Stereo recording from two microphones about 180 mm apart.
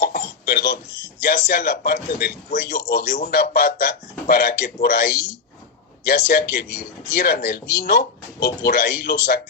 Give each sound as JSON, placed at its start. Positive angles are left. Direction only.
{"t": 0.0, "sound": "a sound", "side_deg": 60}
{"t": 1.2, "sound": "speech", "side_deg": 60}
{"t": 5.1, "sound": "speech", "side_deg": -10}
{"t": 6.1, "sound": "speech", "side_deg": 60}